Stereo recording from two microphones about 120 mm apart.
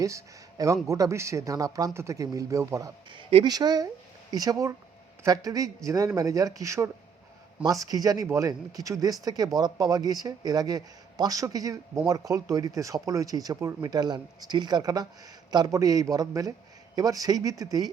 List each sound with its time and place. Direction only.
0.0 s a man's voice: 30° right (ahead or behind)
3.1 s speech: 50° right (ahead or behind)
3.4 s a man's voice: 35° right (ahead or behind)